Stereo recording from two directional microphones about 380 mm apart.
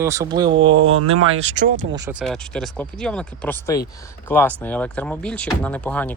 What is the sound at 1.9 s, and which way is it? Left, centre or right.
Speech, centre.